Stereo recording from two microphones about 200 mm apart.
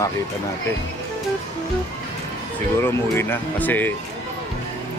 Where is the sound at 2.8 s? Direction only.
10° left (ahead or behind).